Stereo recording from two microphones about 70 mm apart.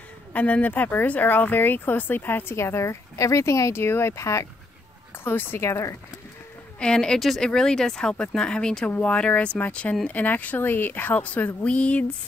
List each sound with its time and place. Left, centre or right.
0.3 s speech: left
3.7 s speech: left
5.2 s speech: left
6.8 s speech: centre
7.2 s speech: centre